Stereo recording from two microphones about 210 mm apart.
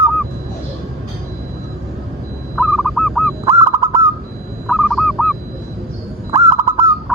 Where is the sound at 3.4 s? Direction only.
15° right (ahead or behind).